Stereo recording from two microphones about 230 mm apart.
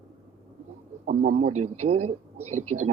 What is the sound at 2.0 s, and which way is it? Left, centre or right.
Speech, right.